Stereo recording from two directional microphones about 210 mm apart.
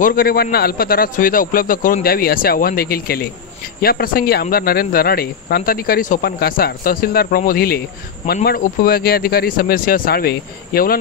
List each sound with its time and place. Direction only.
0.0 s speech: 45° left (ahead or behind)